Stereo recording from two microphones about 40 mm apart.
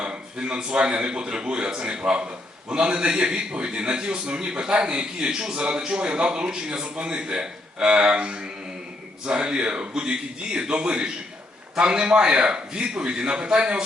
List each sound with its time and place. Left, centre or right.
0.0 s a man's voice: right